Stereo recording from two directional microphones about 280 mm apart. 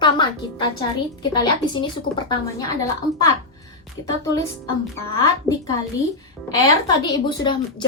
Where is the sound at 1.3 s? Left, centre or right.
Centre.